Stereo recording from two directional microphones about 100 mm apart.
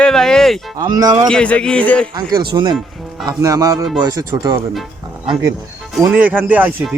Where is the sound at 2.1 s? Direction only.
45° right (ahead or behind).